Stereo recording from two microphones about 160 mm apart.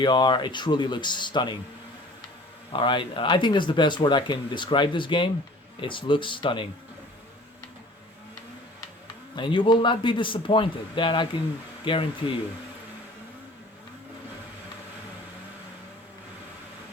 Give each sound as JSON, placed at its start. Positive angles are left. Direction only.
{"t": 0.0, "sound": "speech", "side_deg": 30}
{"t": 2.7, "sound": "speech", "side_deg": 30}
{"t": 9.3, "sound": "speech", "side_deg": 30}